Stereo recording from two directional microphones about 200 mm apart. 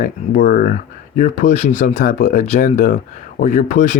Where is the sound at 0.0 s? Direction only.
45° left (ahead or behind).